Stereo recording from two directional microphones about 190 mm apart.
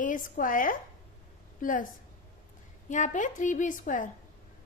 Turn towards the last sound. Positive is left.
turn(degrees=45)  # may be behind; listen again after turning